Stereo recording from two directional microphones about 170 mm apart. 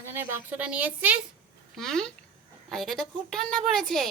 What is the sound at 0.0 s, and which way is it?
A woman's voice, 15° right (ahead or behind).